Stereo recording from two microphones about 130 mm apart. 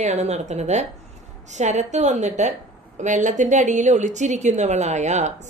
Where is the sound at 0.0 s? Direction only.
60° right (ahead or behind).